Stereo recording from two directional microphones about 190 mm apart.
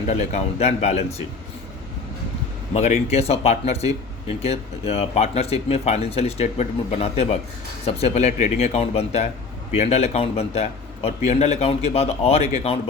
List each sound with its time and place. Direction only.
0.1 s speech: 35° left (ahead or behind)
2.7 s speech: 35° left (ahead or behind)